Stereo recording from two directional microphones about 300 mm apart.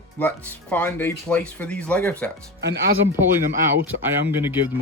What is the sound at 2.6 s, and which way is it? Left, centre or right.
Speech, right.